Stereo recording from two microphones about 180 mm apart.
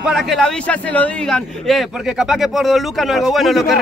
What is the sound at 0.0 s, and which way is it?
A man's voice, centre (ahead or behind).